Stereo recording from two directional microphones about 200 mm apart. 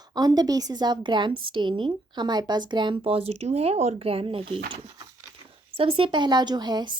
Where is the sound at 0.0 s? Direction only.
20° right (ahead or behind).